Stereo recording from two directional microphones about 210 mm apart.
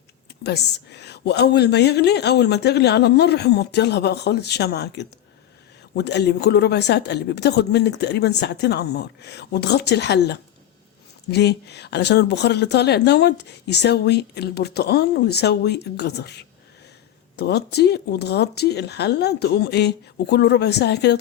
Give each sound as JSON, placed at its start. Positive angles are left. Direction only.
{"t": 0.4, "sound": "speech", "side_deg": 55}